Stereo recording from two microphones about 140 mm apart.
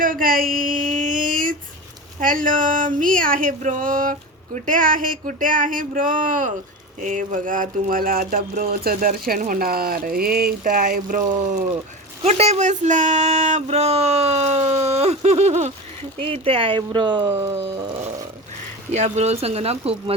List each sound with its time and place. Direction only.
0.0 s a sound: 85° right
2.2 s speech: 70° right (ahead or behind)
12.2 s speech: 50° right (ahead or behind)
16.2 s speech: 40° right (ahead or behind)
18.9 s speech: 50° right (ahead or behind)